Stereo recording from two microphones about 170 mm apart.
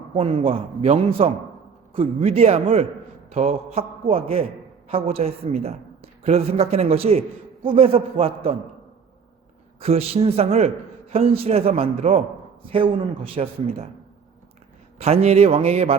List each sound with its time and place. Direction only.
0.1 s a woman's voice: 30° right (ahead or behind)
9.8 s a woman's voice: 35° right (ahead or behind)
14.9 s a woman's voice: 40° right (ahead or behind)